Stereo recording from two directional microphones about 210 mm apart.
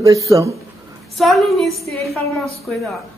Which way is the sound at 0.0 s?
15° right (ahead or behind).